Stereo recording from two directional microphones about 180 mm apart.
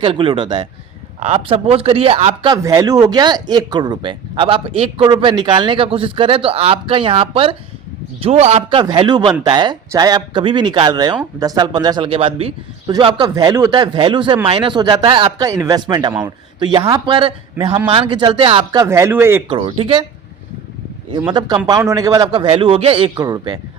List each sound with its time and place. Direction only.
0.0 s speech: 30° right (ahead or behind); by 19.4 s 15° right (ahead or behind)
19.5 s speech: 30° right (ahead or behind)
21.2 s speech: 25° right (ahead or behind)